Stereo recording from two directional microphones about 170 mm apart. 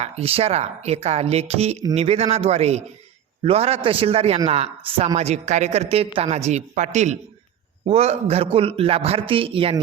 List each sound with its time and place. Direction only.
0.0 s a woman's voice: 35° right (ahead or behind)